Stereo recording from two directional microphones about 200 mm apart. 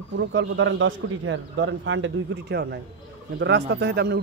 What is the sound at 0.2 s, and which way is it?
A man's voice, 65° right (ahead or behind).